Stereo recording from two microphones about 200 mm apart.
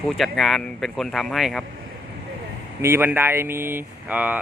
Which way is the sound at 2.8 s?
10° right (ahead or behind).